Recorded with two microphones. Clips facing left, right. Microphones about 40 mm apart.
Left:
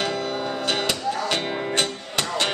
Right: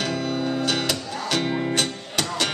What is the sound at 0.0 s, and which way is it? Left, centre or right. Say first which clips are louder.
Music: even; centre.